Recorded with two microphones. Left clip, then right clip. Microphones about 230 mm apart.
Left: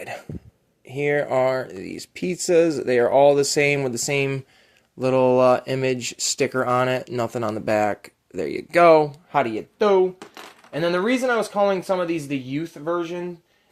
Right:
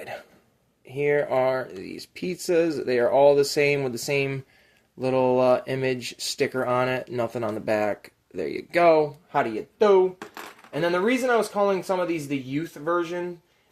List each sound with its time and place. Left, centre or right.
0.9 s speech: left